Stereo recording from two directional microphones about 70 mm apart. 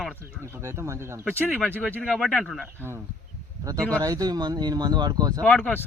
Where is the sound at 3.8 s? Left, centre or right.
Centre.